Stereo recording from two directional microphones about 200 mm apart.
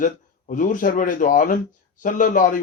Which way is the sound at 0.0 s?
40° left (ahead or behind).